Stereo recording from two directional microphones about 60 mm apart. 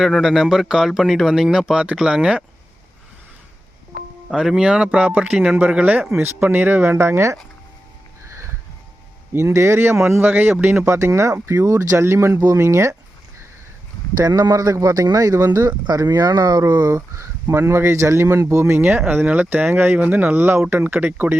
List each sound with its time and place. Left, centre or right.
0.0 s speech: centre
4.4 s speech: centre
6.1 s speech: right
6.9 s speech: right
9.3 s speech: right
9.7 s speech: right
10.8 s speech: right
12.3 s speech: right
12.5 s speech: right
14.2 s a man's voice: right
15.5 s a man's voice: right
16.6 s speech: right
16.9 s speech: right
18.8 s speech: right